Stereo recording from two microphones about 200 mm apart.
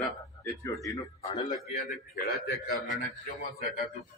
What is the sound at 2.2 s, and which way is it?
A man's voice, 50° left (ahead or behind).